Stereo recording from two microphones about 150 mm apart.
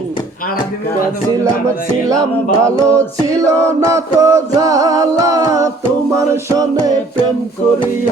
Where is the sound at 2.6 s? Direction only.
20° right (ahead or behind).